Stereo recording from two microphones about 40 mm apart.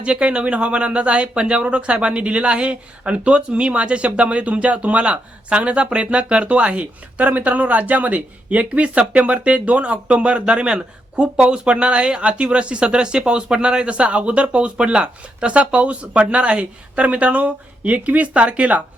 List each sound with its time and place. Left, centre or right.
0.0 s speech: right